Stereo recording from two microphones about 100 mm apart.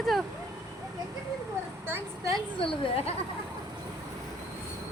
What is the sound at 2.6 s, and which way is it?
Speech, 75° left (ahead or behind).